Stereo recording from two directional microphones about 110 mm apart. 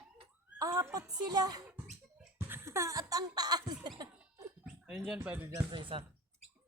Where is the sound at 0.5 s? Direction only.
30° right (ahead or behind).